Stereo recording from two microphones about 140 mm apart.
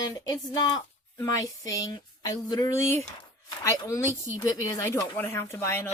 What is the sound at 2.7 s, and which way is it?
Speech, 55° right (ahead or behind).